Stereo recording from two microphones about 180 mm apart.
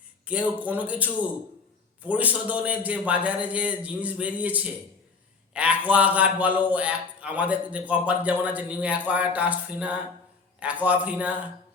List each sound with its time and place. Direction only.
0.3 s a man's voice: 10° right (ahead or behind)